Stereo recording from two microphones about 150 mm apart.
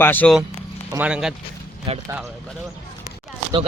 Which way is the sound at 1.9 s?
35° right (ahead or behind).